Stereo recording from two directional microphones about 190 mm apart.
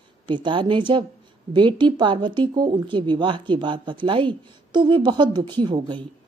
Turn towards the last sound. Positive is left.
turn(degrees=-25)  # may be behind; listen again after turning